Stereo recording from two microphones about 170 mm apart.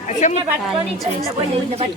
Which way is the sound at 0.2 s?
45° left (ahead or behind).